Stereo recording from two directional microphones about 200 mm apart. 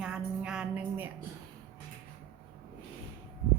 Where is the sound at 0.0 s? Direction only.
5° right (ahead or behind).